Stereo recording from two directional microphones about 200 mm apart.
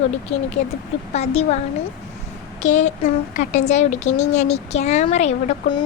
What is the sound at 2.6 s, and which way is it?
Speech, 35° left (ahead or behind).